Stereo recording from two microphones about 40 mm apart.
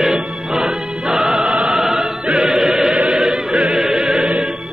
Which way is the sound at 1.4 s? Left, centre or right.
Centre.